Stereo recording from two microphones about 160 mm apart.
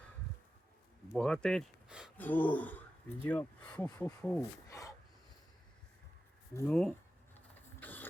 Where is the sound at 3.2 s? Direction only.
10° left (ahead or behind).